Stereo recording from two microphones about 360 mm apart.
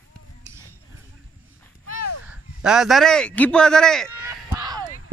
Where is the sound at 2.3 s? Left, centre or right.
Centre.